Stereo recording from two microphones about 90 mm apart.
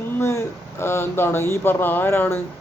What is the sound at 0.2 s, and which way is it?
Speech, 30° left (ahead or behind).